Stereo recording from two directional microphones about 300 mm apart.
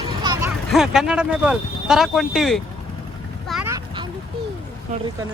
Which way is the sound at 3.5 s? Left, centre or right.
Centre.